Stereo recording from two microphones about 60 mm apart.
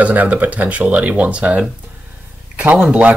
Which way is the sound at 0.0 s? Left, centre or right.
Right.